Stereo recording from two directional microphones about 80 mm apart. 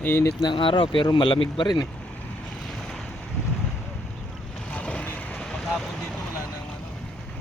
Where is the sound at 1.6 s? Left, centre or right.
Left.